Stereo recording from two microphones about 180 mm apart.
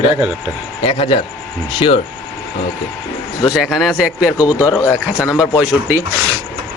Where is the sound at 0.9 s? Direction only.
30° left (ahead or behind).